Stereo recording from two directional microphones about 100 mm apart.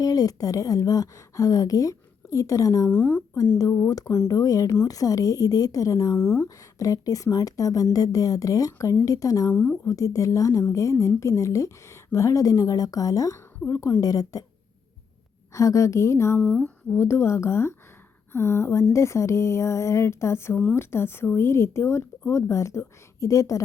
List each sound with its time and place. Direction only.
0.0 s speech: 40° left (ahead or behind)
2.9 s speech: 20° left (ahead or behind)
3.6 s speech: 30° left (ahead or behind)
9.5 s speech: 20° left (ahead or behind)
9.8 s speech: 35° left (ahead or behind)
15.5 s speech: 30° left (ahead or behind)
16.4 s speech: 10° left (ahead or behind)
16.9 s speech: 25° left (ahead or behind)